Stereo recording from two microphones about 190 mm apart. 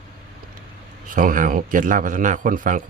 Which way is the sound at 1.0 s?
45° right (ahead or behind).